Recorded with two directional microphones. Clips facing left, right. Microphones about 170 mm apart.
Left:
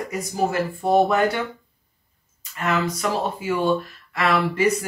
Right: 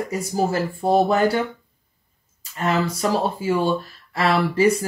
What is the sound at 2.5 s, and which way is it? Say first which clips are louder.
A woman's voice: right 2 dB; 30° right (ahead or behind).